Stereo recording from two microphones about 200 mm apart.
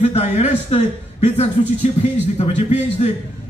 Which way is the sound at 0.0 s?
35° left (ahead or behind).